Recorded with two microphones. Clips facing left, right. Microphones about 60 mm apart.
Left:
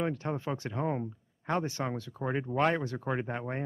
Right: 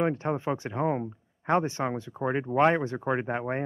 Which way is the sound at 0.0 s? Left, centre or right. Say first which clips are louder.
Right 5 dB; right.